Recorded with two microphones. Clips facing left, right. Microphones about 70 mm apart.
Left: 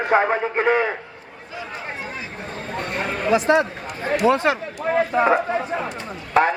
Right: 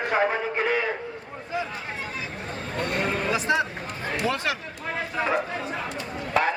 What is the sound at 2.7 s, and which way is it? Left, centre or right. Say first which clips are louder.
A man's voice: even; left.